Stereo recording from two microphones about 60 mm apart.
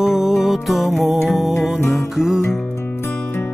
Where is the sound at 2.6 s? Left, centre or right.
Left.